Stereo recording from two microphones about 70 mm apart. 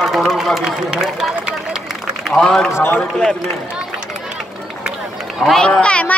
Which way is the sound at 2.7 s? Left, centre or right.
Left.